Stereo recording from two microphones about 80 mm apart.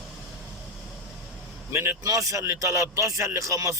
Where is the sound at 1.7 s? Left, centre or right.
Right.